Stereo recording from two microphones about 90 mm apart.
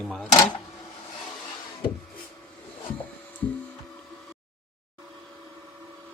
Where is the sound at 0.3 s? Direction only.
50° left (ahead or behind).